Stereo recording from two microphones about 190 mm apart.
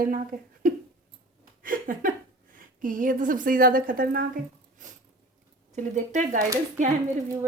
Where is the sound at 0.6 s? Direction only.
45° right (ahead or behind).